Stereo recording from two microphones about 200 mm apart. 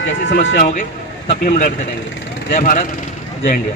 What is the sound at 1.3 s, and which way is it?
Speech, 40° left (ahead or behind).